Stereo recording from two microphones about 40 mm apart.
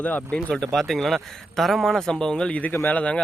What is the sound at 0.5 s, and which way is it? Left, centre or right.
Speech, centre.